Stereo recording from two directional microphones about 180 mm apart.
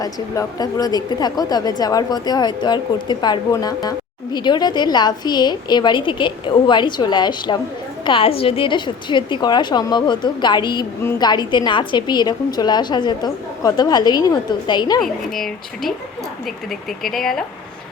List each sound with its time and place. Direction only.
0.0 s a woman's voice: 20° left (ahead or behind)
15.0 s speech: centre (ahead or behind)
17.0 s speech: centre (ahead or behind)